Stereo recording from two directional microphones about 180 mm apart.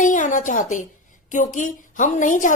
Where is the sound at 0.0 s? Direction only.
45° left (ahead or behind).